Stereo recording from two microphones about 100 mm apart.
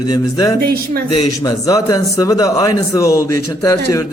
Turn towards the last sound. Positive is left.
turn(degrees=35)  # may be behind; listen again after turning